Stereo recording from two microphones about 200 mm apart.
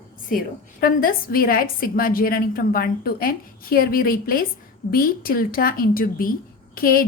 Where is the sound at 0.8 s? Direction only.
45° left (ahead or behind).